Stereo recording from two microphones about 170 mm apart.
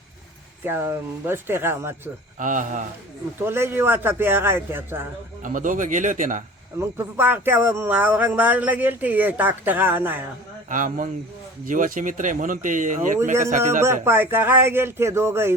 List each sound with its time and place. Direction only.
0.6 s speech: 15° right (ahead or behind)
2.4 s speech: 50° right (ahead or behind)
3.4 s speech: 15° right (ahead or behind)
5.4 s speech: 50° right (ahead or behind)
6.7 s speech: 15° right (ahead or behind)
10.7 s speech: 50° right (ahead or behind)
14.0 s speech: 15° right (ahead or behind)